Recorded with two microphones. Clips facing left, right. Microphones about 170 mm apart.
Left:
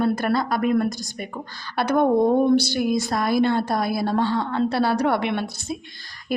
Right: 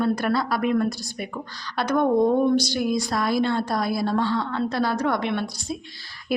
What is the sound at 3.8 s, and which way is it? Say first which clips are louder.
Speech: left 1 dB; 55° left (ahead or behind).